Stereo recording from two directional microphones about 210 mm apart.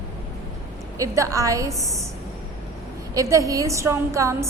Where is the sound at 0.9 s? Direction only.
15° right (ahead or behind).